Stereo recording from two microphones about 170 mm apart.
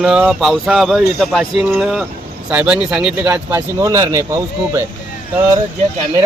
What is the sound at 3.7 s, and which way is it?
Speech, 20° right (ahead or behind).